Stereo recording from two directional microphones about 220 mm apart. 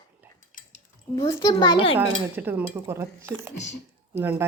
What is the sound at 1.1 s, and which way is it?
Speech, 20° left (ahead or behind).